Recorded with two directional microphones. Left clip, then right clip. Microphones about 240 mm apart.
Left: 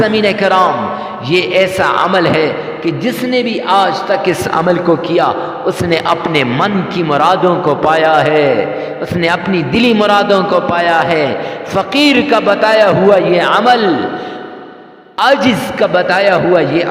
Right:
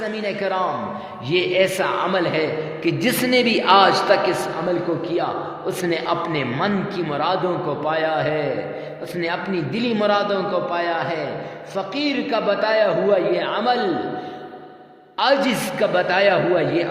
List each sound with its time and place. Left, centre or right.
0.0 s a man's voice: left
3.0 s a man's voice: centre
5.0 s a man's voice: left
15.2 s a man's voice: left